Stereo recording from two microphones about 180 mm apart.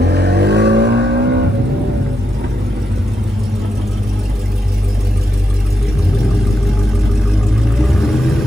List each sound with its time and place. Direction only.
0.0 s vehicle: 65° right (ahead or behind)